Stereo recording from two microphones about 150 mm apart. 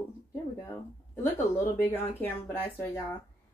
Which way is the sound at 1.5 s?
15° left (ahead or behind).